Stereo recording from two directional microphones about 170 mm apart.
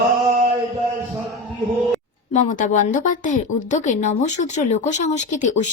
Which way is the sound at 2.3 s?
45° left (ahead or behind).